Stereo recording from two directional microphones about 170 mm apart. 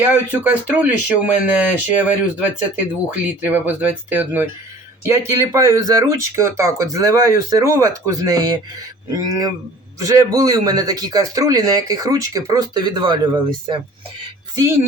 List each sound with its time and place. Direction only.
0.0 s a man's voice: 10° right (ahead or behind); by 13.7 s 25° right (ahead or behind)